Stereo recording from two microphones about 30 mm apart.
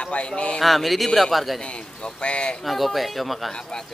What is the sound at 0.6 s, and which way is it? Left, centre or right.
A man's voice, centre.